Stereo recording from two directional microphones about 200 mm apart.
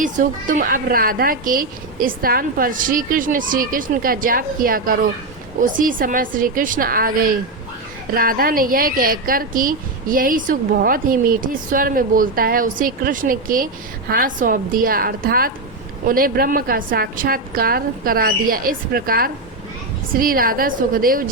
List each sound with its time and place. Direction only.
0.0 s speech: 40° right (ahead or behind)
8.1 s speech: 45° right (ahead or behind)